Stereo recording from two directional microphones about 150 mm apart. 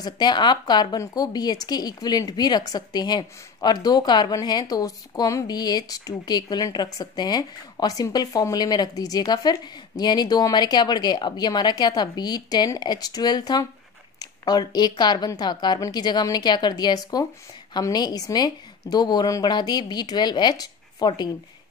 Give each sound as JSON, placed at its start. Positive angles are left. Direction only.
{"t": 0.0, "sound": "a woman's voice", "side_deg": 30}